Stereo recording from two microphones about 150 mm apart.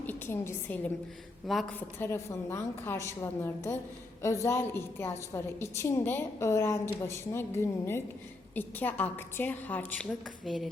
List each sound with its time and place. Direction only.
0.0 s a woman's voice: 15° left (ahead or behind)
1.5 s a woman's voice: centre (ahead or behind)
2.0 s a woman's voice: 20° left (ahead or behind); by 10.7 s centre (ahead or behind)